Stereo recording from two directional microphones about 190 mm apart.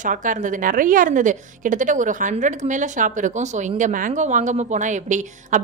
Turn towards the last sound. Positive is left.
turn(degrees=-40)  # may be behind; listen again after turning